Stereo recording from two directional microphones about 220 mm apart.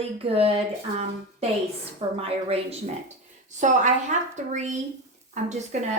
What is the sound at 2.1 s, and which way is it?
Speech, 25° right (ahead or behind).